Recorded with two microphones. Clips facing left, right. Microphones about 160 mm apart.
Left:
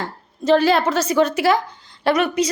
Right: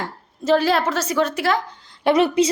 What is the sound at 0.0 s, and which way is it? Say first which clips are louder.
A woman's voice: left 2 dB; 5° right (ahead or behind).